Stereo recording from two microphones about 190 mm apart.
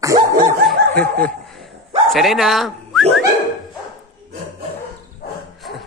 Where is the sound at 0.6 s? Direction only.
5° left (ahead or behind).